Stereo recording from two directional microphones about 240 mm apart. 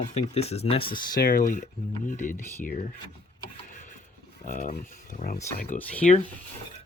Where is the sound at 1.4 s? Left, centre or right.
Left.